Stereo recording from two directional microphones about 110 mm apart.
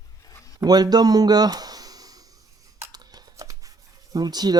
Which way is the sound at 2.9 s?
40° right (ahead or behind).